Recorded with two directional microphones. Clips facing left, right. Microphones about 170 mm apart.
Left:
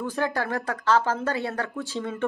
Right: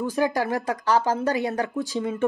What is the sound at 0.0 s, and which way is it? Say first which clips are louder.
A woman's voice: right 4 dB; 10° right (ahead or behind).